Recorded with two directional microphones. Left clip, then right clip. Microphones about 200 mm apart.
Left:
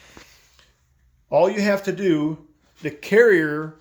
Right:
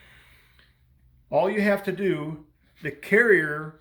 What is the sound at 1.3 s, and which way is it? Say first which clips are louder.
Speech: left 4 dB; 45° left (ahead or behind).